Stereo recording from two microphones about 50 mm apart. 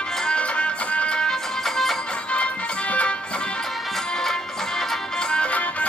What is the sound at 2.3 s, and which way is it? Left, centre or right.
Music, left.